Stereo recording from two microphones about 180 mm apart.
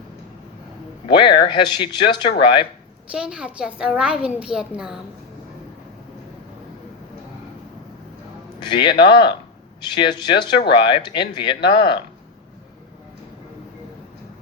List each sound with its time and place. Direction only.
1.0 s speech: 25° left (ahead or behind)
3.1 s a woman's voice: 5° right (ahead or behind)
8.6 s speech: 25° left (ahead or behind)